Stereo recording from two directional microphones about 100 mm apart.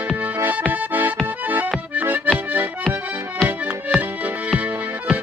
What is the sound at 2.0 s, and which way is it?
Accordion, 20° right (ahead or behind).